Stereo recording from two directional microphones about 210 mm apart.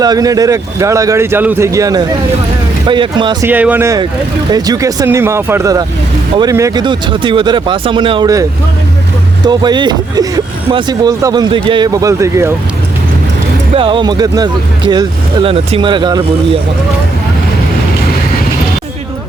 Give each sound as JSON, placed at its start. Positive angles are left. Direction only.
{"t": 0.0, "sound": "a man's voice", "side_deg": -15}
{"t": 3.4, "sound": "a man's voice", "side_deg": -10}
{"t": 13.7, "sound": "speech", "side_deg": -25}